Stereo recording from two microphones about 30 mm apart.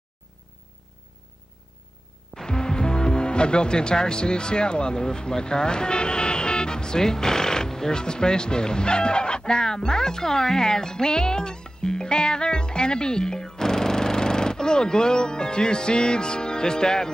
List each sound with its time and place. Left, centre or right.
2.4 s speech: left